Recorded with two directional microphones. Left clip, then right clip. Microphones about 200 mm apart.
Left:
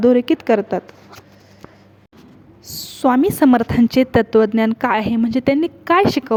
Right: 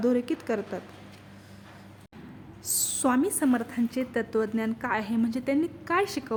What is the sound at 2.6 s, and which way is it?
A woman's voice, 25° left (ahead or behind).